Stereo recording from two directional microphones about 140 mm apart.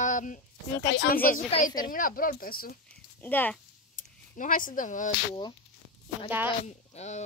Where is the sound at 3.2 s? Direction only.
15° left (ahead or behind).